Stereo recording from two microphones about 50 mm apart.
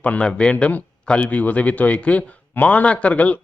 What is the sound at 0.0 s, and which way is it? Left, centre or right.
A man's voice, left.